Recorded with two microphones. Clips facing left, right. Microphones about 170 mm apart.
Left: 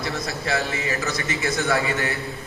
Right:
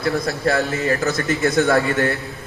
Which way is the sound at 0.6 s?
Centre (ahead or behind).